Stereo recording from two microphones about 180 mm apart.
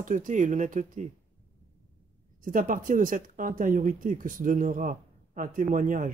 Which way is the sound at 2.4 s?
50° right (ahead or behind).